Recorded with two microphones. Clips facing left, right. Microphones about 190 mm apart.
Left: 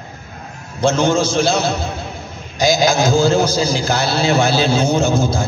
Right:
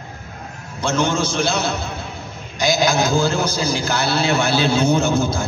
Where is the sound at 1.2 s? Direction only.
60° right (ahead or behind).